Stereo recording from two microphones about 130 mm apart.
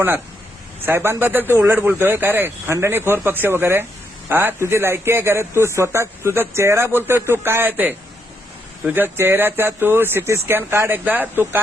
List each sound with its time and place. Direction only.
0.8 s a man's voice: 15° right (ahead or behind)